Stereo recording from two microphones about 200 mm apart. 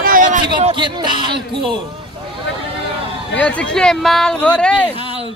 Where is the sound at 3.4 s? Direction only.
5° left (ahead or behind).